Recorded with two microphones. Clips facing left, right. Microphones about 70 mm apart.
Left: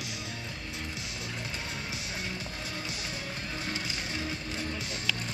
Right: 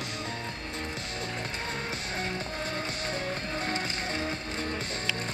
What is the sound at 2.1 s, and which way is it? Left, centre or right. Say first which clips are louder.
Music: right 5 dB; right.